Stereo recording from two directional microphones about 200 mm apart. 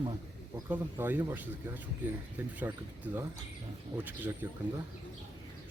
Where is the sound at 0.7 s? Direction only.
10° right (ahead or behind).